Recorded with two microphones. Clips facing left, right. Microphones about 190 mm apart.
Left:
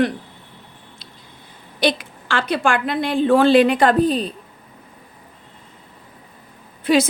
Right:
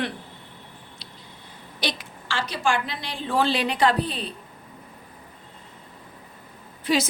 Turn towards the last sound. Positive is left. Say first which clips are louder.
# left 7 dB
turn(degrees=55)  # may be behind; listen again after turning